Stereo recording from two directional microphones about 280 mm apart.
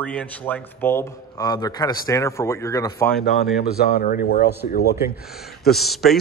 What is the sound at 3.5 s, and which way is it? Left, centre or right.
Speech, left.